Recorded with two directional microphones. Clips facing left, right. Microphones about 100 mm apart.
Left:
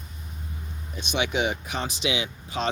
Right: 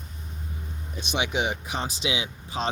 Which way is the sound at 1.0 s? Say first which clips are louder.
Left 1 dB; 30° right (ahead or behind).